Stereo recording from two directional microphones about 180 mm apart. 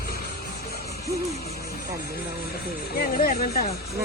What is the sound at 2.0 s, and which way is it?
Speech, 60° left (ahead or behind).